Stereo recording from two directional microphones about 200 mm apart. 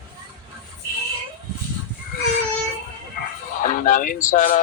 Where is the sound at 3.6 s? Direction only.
40° left (ahead or behind).